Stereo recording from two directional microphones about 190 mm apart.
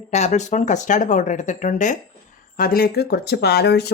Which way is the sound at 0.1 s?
35° left (ahead or behind).